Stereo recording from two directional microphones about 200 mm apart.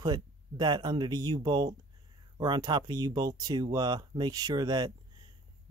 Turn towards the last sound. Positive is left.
turn(degrees=-20)  # may be behind; listen again after turning